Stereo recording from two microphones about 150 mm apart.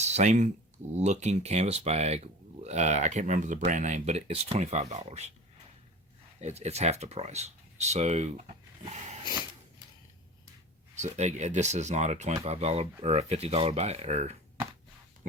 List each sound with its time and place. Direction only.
0.0 s speech: 50° right (ahead or behind)
6.4 s speech: 45° right (ahead or behind)
10.9 s speech: 50° right (ahead or behind)